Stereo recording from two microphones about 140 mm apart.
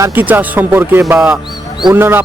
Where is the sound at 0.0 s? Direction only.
15° right (ahead or behind).